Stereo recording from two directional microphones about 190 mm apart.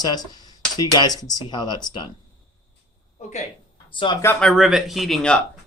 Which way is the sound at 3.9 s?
25° left (ahead or behind).